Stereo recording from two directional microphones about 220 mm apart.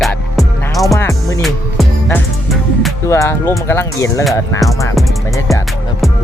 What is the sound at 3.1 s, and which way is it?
Speech, 10° left (ahead or behind).